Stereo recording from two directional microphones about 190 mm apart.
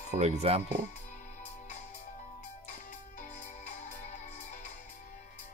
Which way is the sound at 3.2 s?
40° left (ahead or behind).